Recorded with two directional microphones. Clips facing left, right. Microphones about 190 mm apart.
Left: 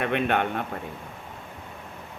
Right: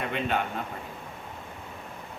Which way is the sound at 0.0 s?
65° left (ahead or behind).